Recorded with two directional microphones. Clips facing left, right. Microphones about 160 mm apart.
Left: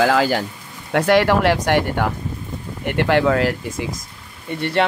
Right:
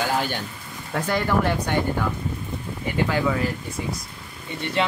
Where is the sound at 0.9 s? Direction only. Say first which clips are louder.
Left 8 dB; 80° left.